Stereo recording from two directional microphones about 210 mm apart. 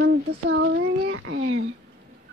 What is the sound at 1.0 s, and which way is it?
Speech, 65° right (ahead or behind).